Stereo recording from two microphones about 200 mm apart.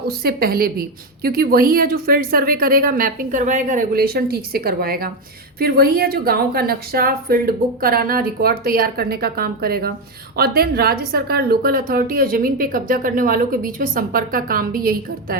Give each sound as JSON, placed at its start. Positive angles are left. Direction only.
{"t": 0.2, "sound": "a woman's voice", "side_deg": -50}